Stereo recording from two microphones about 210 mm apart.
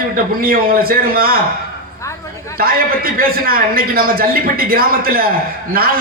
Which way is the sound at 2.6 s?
45° right (ahead or behind).